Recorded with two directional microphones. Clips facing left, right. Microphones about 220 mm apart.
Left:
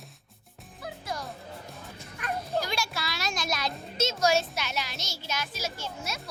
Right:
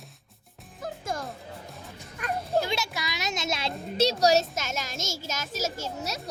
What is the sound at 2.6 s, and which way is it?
A child's voice, 25° right (ahead or behind).